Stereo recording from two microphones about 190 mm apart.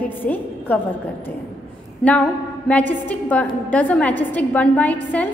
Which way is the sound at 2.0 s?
5° left (ahead or behind).